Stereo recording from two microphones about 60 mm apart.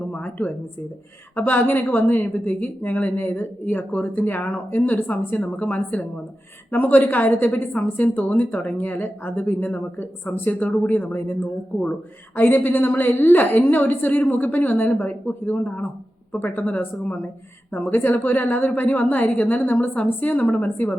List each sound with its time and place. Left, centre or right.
0.1 s a sound: left
1.4 s a woman's voice: left
17.7 s a woman's voice: left